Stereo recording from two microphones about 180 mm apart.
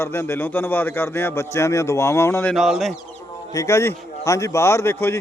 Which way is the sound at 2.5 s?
Centre (ahead or behind).